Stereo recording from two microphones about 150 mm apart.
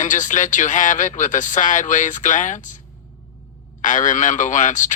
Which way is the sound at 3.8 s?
55° left (ahead or behind).